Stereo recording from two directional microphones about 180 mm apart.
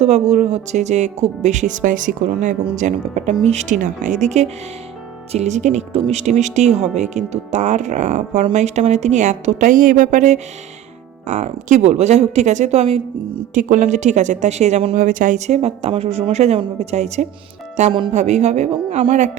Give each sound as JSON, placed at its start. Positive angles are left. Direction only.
{"t": 0.0, "sound": "speech", "side_deg": -40}